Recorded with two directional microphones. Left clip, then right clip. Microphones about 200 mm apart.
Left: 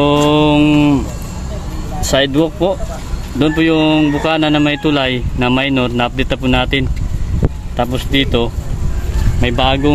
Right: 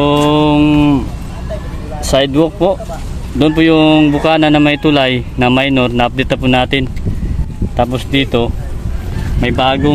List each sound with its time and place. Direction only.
0.0 s mantra: 5° right (ahead or behind)
2.0 s speech: 10° right (ahead or behind)